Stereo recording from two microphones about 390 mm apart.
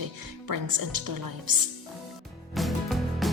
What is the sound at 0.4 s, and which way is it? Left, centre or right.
Speech, right.